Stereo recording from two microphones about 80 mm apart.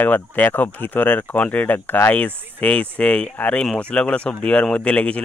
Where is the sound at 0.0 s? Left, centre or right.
Left.